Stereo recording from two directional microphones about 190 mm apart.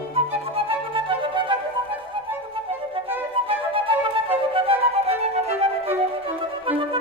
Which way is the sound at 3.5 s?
30° right (ahead or behind).